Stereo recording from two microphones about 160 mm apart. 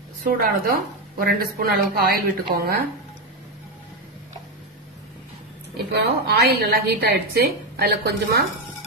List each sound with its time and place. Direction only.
0.2 s a woman's voice: 65° right (ahead or behind)
5.9 s a woman's voice: 90° right